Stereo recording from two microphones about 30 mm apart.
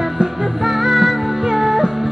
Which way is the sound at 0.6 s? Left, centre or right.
Centre.